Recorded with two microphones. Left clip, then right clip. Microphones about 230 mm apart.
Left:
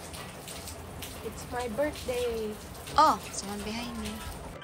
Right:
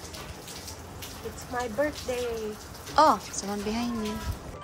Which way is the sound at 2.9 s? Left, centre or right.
Right.